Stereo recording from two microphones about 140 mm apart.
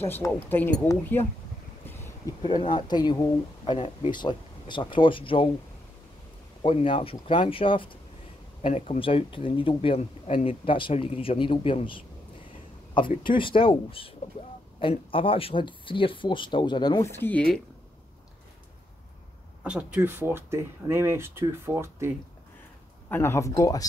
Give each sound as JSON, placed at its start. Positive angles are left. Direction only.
{"t": 0.1, "sound": "speech", "side_deg": 15}
{"t": 2.4, "sound": "speech", "side_deg": 35}
{"t": 6.6, "sound": "speech", "side_deg": 40}
{"t": 17.1, "sound": "speech", "side_deg": 15}
{"t": 19.6, "sound": "speech", "side_deg": -10}
{"t": 23.0, "sound": "speech", "side_deg": 15}